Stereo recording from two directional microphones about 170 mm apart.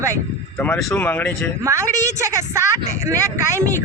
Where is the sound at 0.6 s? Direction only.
15° left (ahead or behind).